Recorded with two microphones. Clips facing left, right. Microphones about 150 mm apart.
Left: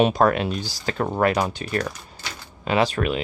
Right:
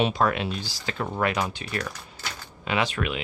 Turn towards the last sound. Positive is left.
turn(degrees=40)  # may be behind; listen again after turning